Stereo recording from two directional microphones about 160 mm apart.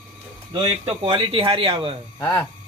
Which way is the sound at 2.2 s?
15° left (ahead or behind).